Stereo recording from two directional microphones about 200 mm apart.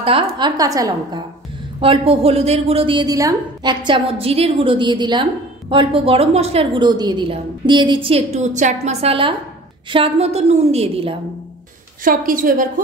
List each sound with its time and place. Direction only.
0.0 s a woman's voice: 25° right (ahead or behind)
12.0 s a woman's voice: 45° right (ahead or behind)